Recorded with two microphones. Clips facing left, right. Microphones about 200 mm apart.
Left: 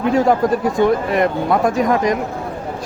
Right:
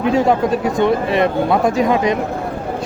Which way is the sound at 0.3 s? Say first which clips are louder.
Even; 20° right (ahead or behind).